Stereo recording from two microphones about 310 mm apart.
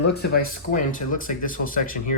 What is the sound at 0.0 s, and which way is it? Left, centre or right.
Speech, left.